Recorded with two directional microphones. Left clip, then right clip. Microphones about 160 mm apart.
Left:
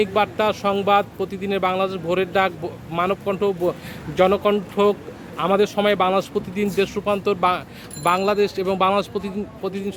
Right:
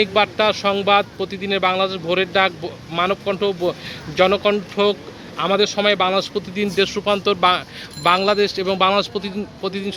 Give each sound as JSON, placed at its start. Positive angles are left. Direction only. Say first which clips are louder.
{"t": 0.0, "sound": "speech", "louder": "right 3 dB", "side_deg": 10}
{"t": 6.7, "sound": "a man's voice", "louder": "right 3 dB", "side_deg": 10}